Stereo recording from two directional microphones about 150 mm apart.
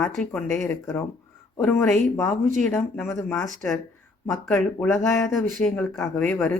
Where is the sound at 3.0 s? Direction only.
5° left (ahead or behind).